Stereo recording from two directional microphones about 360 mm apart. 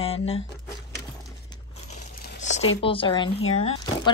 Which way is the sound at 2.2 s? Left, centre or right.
Left.